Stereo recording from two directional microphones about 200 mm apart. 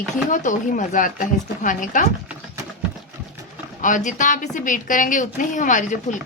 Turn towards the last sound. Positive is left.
turn(degrees=40)  # may be behind; listen again after turning